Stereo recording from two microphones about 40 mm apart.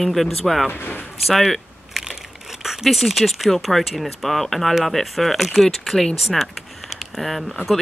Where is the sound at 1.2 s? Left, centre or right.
Centre.